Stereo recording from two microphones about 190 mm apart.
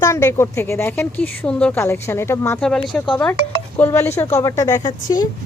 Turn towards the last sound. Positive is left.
turn(degrees=20)  # may be behind; listen again after turning